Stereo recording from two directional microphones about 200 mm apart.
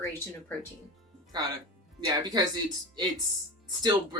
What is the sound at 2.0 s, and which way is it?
Speech, 20° right (ahead or behind).